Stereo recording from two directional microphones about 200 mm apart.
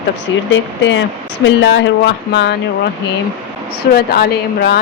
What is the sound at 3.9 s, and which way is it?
Speech, 50° left (ahead or behind).